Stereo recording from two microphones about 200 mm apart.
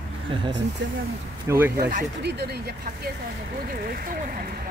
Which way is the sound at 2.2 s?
55° right (ahead or behind).